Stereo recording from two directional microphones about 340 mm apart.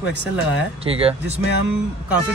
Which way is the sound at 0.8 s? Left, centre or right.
Centre.